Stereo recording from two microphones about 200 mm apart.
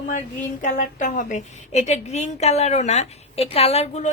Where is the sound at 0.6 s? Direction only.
40° left (ahead or behind).